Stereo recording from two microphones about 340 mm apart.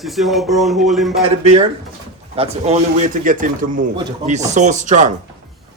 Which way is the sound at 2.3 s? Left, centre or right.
Centre.